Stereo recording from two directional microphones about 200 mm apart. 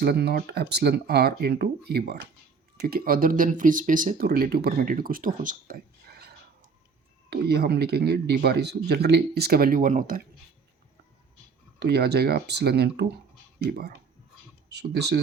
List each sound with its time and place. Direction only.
0.0 s speech: 55° right (ahead or behind)
11.8 s speech: 55° right (ahead or behind)